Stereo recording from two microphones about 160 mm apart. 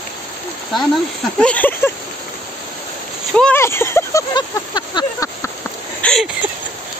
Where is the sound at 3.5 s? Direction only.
15° left (ahead or behind).